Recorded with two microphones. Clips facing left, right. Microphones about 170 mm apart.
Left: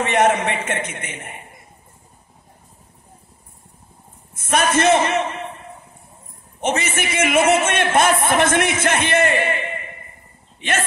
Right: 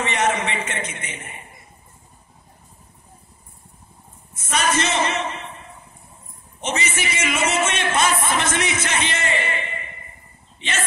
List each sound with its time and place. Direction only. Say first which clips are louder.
0.0 s a man's voice: left 5 dB; 55° left (ahead or behind)
4.5 s a man's voice: left 6 dB; 55° left (ahead or behind)
6.6 s a man's voice: left 4 dB; 55° left (ahead or behind)